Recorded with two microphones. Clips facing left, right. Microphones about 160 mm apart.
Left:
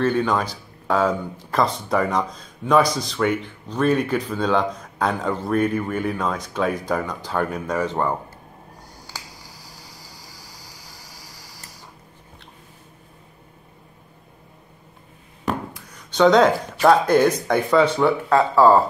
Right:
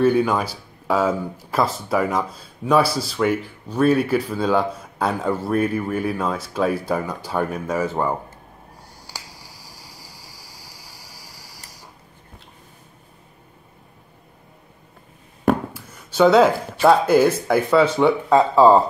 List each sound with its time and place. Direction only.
0.0 s speech: 10° right (ahead or behind)
9.0 s finger snapping: 10° right (ahead or behind)
15.7 s a sound: 5° right (ahead or behind)
16.8 s speech: 5° right (ahead or behind)
18.0 s speech: 20° right (ahead or behind)